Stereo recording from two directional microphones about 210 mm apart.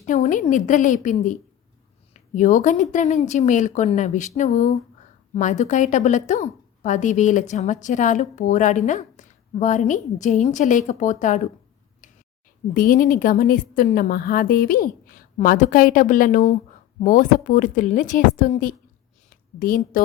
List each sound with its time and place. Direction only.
0.0 s a woman's voice: 40° left (ahead or behind)
2.3 s a woman's voice: 35° left (ahead or behind)
12.7 s a woman's voice: 40° left (ahead or behind)